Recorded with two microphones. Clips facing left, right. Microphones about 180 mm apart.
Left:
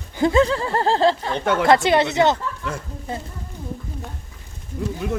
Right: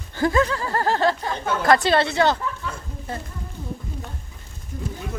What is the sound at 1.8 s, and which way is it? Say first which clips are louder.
Speech: left 2 dB; 20° left (ahead or behind).